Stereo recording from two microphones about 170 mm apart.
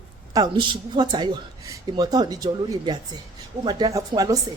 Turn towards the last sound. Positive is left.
turn(degrees=-20)  # may be behind; listen again after turning